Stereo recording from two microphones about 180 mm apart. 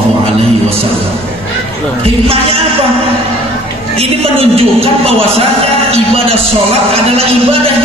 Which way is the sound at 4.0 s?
30° right (ahead or behind).